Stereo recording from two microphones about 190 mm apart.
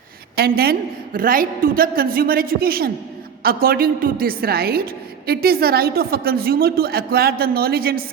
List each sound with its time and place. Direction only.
0.3 s a woman's voice: 55° right (ahead or behind)